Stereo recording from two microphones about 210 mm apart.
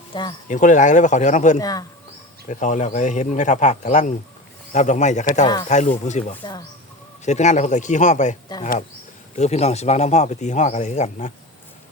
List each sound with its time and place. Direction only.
0.1 s speech: 20° left (ahead or behind)
0.4 s speech: 35° left (ahead or behind)
1.5 s speech: 15° left (ahead or behind)
2.5 s speech: 35° left (ahead or behind)